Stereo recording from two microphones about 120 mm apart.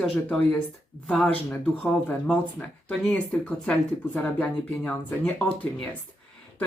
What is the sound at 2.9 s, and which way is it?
Speech, 10° left (ahead or behind).